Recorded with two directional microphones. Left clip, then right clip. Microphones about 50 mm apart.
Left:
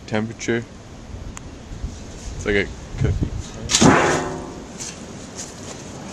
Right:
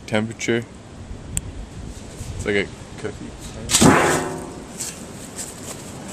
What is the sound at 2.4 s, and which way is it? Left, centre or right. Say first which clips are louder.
Speech: left 1 dB; centre.